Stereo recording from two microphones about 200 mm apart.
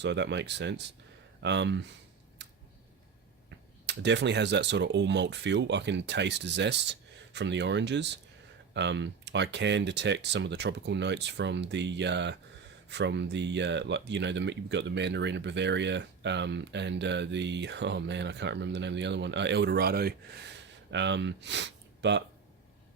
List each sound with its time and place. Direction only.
0.0 s speech: 60° right (ahead or behind)
2.4 s a sound: 60° right (ahead or behind)
3.8 s speech: 60° right (ahead or behind)